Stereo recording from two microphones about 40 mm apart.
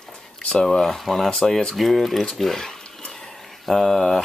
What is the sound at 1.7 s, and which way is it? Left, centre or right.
Speech, centre.